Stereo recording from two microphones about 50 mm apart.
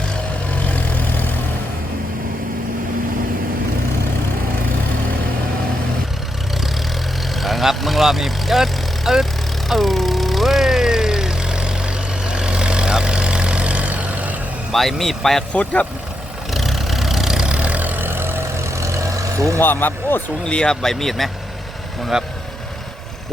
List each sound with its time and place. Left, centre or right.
0.7 s vehicle: left
7.3 s vehicle: centre; by 14.3 s right
14.7 s speech: centre
15.5 s speech: left
16.5 s vehicle: centre
17.6 s vehicle: right
19.5 s speech: left
20.4 s speech: centre
22.1 s speech: centre